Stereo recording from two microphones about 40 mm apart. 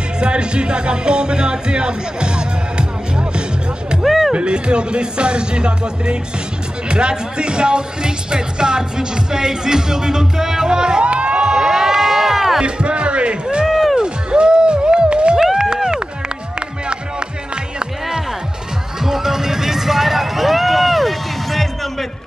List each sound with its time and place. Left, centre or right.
0.2 s speech: right
4.0 s music: centre
4.3 s speech: right
11.1 s crowd: right
11.4 s crowd: centre
12.6 s music: right
13.7 s music: centre
13.9 s music: right
15.3 s run: centre
19.0 s music: centre